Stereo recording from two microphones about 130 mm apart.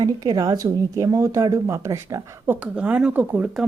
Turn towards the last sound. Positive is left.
turn(degrees=-10)  # may be behind; listen again after turning